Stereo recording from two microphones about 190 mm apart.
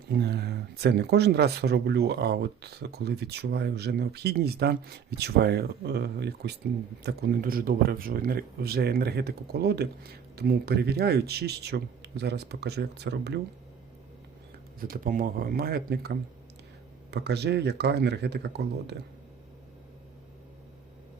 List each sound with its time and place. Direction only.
0.1 s speech: 60° right (ahead or behind)
14.8 s speech: 50° right (ahead or behind)